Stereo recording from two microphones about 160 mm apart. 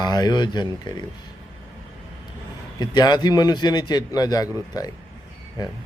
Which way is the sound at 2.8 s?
25° left (ahead or behind).